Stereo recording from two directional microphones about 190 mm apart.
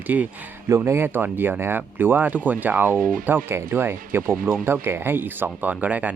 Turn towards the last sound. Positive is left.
turn(degrees=-10)  # may be behind; listen again after turning